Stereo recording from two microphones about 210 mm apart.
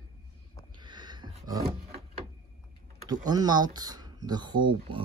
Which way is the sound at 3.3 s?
20° right (ahead or behind).